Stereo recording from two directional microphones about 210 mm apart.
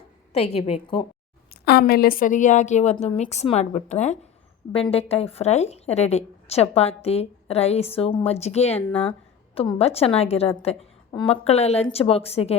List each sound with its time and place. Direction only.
0.3 s a woman's voice: 30° left (ahead or behind)
1.5 s a woman's voice: 50° left (ahead or behind); by 12.5 s 30° left (ahead or behind)